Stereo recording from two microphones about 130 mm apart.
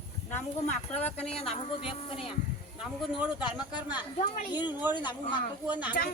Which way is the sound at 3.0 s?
5° right (ahead or behind).